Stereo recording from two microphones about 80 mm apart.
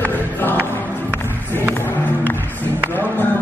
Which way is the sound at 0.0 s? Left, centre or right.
Left.